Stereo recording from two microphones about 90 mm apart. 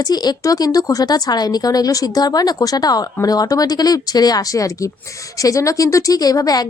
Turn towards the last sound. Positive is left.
turn(degrees=45)  # may be behind; listen again after turning